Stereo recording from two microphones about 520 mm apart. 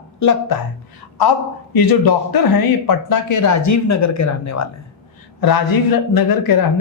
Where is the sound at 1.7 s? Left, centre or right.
Left.